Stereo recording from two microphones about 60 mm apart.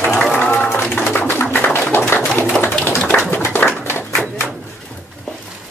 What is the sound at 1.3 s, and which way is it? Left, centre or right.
Music, left.